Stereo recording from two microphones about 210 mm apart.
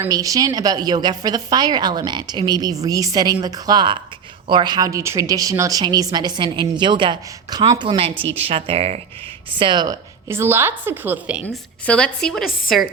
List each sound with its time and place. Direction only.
0.0 s a woman's voice: 15° right (ahead or behind)
11.4 s a woman's voice: 5° left (ahead or behind)